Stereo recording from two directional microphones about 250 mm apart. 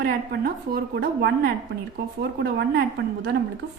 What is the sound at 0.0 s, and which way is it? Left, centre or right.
A woman's voice, right.